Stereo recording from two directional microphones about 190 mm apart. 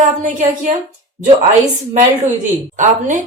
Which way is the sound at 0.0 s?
40° right (ahead or behind).